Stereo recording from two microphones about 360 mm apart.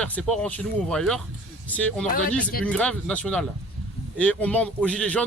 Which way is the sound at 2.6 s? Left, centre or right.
Centre.